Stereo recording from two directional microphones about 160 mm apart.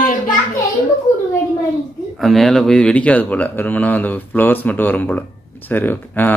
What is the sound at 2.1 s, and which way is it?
Speech, centre (ahead or behind).